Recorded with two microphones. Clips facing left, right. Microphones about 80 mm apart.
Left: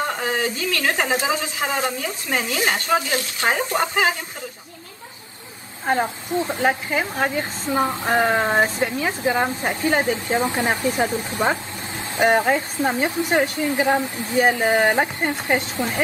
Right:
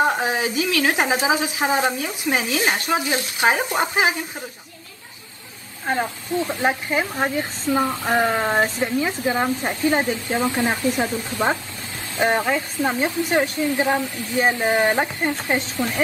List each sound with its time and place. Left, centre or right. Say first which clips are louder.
0.0 s a woman's voice: right 3 dB; centre
5.9 s a woman's voice: left 2 dB; left
6.6 s a woman's voice: even; centre
7.6 s a woman's voice: even; left